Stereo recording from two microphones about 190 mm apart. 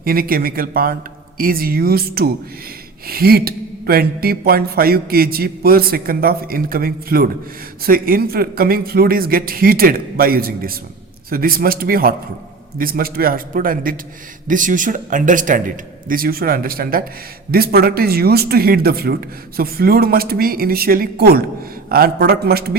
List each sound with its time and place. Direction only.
0.0 s speech: 50° right (ahead or behind)